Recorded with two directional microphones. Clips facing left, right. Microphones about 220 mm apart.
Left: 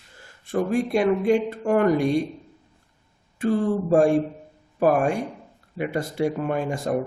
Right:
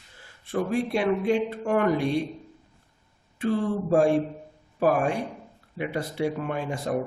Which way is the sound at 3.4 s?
45° left (ahead or behind).